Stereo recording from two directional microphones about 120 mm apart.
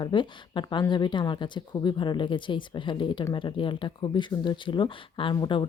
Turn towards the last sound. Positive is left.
turn(degrees=40)  # may be behind; listen again after turning